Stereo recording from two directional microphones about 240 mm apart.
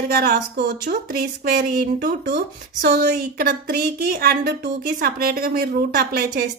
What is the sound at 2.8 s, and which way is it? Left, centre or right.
A woman's voice, right.